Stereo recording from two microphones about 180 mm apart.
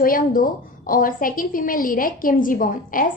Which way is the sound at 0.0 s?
50° left (ahead or behind).